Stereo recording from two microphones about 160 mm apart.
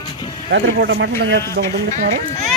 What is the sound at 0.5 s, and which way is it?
Speech, 90° right.